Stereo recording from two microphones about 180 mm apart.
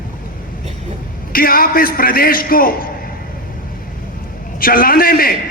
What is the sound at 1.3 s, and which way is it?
A man's voice, 55° left (ahead or behind).